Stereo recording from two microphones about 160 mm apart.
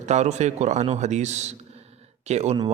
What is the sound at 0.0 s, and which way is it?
A man's voice, 45° right (ahead or behind).